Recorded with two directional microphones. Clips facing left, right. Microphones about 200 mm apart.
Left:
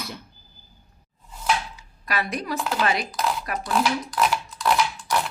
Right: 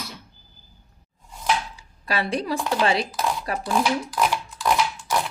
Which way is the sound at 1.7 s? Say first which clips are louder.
Right 1 dB; 30° right (ahead or behind).